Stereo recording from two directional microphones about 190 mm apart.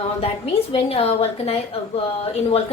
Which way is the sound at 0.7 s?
30° left (ahead or behind).